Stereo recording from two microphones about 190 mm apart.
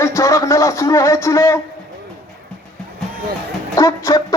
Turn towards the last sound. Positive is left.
turn(degrees=15)  # may be behind; listen again after turning